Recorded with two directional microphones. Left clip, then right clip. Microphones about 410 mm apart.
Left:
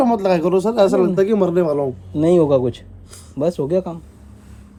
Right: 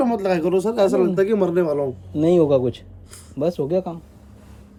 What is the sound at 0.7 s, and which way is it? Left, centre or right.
Speech, left.